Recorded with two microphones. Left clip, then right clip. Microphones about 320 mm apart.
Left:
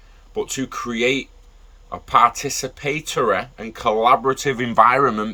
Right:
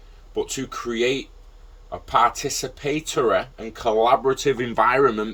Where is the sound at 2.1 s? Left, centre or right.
Centre.